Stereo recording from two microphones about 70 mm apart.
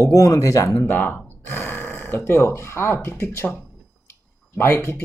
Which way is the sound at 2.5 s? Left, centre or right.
Left.